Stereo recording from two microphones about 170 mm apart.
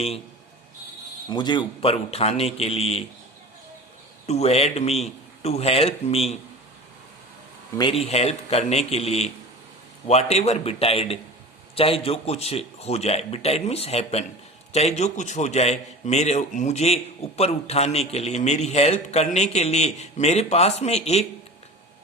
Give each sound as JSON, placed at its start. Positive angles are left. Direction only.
{"t": 1.3, "sound": "a man's voice", "side_deg": 25}
{"t": 4.3, "sound": "a man's voice", "side_deg": 40}
{"t": 7.8, "sound": "a man's voice", "side_deg": 35}